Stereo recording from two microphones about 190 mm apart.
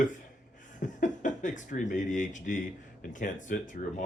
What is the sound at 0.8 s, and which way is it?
Speech, 40° left (ahead or behind).